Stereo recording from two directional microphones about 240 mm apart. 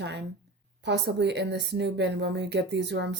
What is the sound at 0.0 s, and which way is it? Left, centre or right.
A woman's voice, right.